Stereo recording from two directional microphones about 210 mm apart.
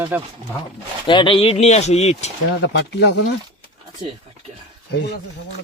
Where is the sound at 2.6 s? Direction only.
55° left (ahead or behind).